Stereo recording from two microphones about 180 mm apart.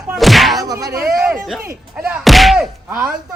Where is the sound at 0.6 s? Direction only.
20° right (ahead or behind).